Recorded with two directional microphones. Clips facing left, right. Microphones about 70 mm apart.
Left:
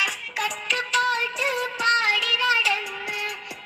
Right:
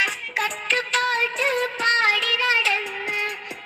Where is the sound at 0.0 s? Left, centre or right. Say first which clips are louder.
Right 3 dB; right.